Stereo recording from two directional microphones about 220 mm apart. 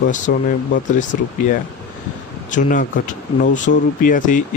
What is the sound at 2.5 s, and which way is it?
Speech, 35° left (ahead or behind).